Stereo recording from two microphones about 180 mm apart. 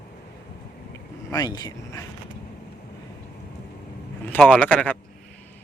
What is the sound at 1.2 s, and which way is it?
Speech, 20° left (ahead or behind).